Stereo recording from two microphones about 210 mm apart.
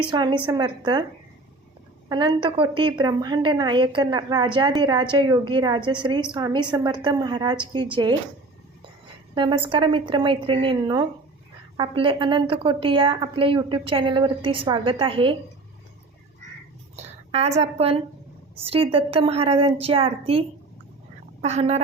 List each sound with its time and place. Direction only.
0.1 s a woman's voice: 20° right (ahead or behind)
2.0 s a woman's voice: 20° right (ahead or behind)
9.3 s a woman's voice: 20° right (ahead or behind)
17.0 s a woman's voice: 30° right (ahead or behind)
21.4 s fowl: 30° right (ahead or behind)